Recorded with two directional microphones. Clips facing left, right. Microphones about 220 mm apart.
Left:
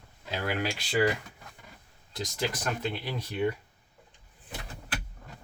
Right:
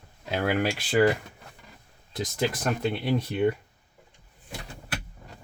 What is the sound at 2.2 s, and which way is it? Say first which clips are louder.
Speech: right 5 dB; 50° right (ahead or behind).